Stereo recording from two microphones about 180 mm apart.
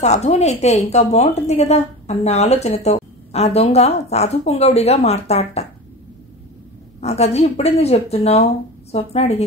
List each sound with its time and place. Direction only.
0.0 s a woman's voice: 40° left (ahead or behind)
7.0 s a woman's voice: 35° left (ahead or behind)